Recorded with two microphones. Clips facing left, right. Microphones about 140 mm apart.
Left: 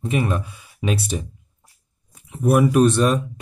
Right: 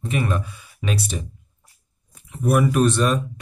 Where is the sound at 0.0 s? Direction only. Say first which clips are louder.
Left 2 dB; 20° left (ahead or behind).